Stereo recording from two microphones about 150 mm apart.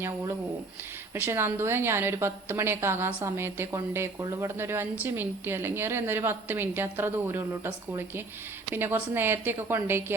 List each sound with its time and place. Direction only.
1.1 s a woman's voice: 15° right (ahead or behind)